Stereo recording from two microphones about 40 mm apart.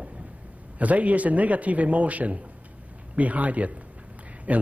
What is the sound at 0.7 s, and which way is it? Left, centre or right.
A man's voice, right.